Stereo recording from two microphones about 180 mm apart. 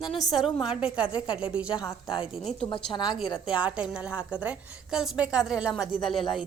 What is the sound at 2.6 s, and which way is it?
Speech, 25° left (ahead or behind).